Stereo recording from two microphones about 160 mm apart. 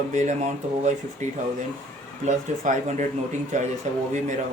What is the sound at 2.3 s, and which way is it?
Speech, 50° right (ahead or behind).